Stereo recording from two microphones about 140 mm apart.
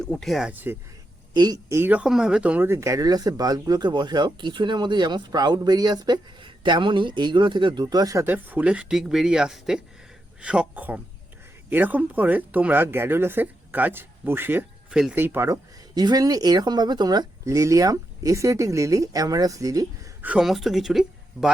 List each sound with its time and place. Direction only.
0.0 s speech: 5° left (ahead or behind)
0.5 s speech: 15° right (ahead or behind)
1.3 s speech: 30° right (ahead or behind)
1.7 s speech: 15° right (ahead or behind)
16.0 s speech: 30° right (ahead or behind)
20.2 s speech: 5° right (ahead or behind)